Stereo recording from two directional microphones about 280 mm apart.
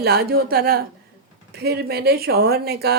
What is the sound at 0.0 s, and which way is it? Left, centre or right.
Speech, right.